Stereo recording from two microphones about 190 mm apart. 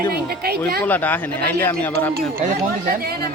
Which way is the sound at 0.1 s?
55° right (ahead or behind).